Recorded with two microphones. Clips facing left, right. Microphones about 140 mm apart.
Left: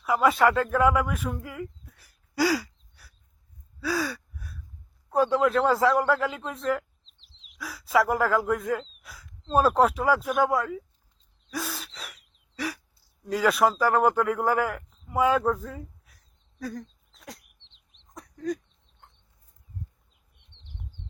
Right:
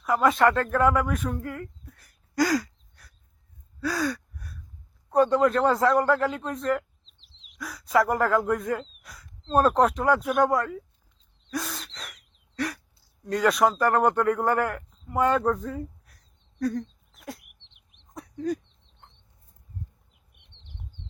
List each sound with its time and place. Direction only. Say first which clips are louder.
0.0 s speech: even; 5° left (ahead or behind)
3.8 s gasp: right 1 dB; centre (ahead or behind)
5.1 s a man's voice: right 2 dB; centre (ahead or behind)
11.4 s gasp: right 1 dB; 5° left (ahead or behind)
13.2 s speech: right 1 dB; 5° left (ahead or behind)
15.0 s a sound: even; 5° left (ahead or behind)
17.7 s bird: right 2 dB; 15° right (ahead or behind)
18.1 s a sound: right 2 dB; centre (ahead or behind)
20.1 s bee: right 2 dB; 20° right (ahead or behind)